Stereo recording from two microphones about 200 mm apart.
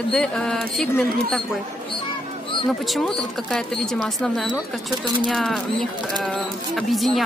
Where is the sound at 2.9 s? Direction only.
Centre (ahead or behind).